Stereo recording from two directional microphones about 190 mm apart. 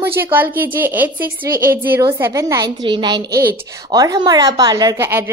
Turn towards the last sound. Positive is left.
turn(degrees=-10)  # may be behind; listen again after turning